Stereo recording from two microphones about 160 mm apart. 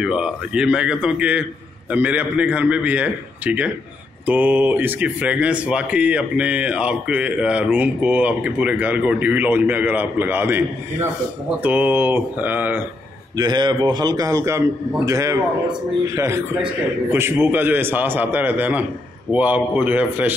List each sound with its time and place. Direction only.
0.0 s speech: 5° right (ahead or behind)
13.4 s a man's voice: 25° right (ahead or behind)
17.1 s speech: 15° right (ahead or behind)